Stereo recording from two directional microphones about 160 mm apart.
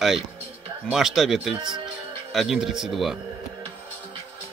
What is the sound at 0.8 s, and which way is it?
A man's voice, centre (ahead or behind).